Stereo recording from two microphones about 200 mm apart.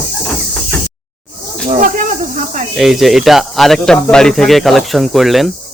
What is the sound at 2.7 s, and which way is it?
Speech, centre (ahead or behind).